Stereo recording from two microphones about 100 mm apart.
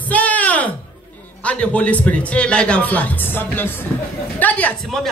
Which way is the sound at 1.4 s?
10° left (ahead or behind).